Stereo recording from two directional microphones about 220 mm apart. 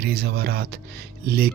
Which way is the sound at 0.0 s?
45° right (ahead or behind).